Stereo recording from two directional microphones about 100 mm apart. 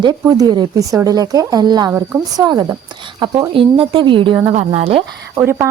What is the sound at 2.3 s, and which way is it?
A woman's voice, 40° right (ahead or behind).